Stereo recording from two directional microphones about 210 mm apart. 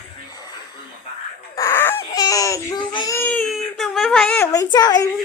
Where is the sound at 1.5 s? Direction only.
10° left (ahead or behind).